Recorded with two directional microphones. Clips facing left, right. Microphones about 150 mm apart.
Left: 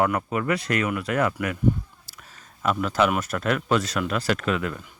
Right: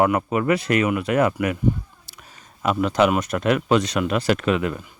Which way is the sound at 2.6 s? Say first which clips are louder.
Right 3 dB; 10° right (ahead or behind).